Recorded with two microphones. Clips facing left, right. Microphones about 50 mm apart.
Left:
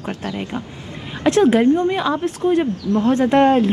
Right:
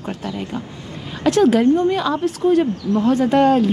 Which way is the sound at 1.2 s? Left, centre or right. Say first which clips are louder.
Even; centre.